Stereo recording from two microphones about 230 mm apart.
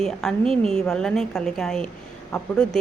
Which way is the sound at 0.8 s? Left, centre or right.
Centre.